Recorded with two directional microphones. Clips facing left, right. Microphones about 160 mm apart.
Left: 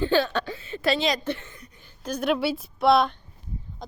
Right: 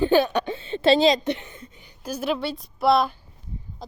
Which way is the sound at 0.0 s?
15° right (ahead or behind).